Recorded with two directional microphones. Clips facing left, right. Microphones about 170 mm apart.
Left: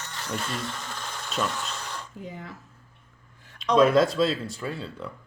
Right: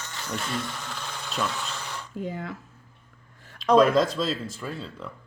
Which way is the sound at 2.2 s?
70° right (ahead or behind).